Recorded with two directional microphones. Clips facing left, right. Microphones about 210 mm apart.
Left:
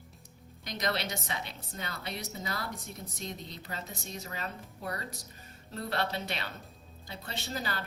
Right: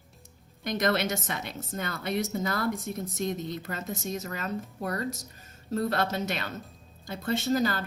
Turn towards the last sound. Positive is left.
turn(degrees=-45)  # may be behind; listen again after turning